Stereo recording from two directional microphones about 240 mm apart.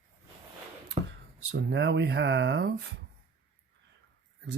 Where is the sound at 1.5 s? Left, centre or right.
Right.